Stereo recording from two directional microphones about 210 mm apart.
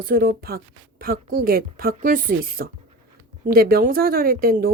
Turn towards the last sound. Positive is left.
turn(degrees=-45)  # may be behind; listen again after turning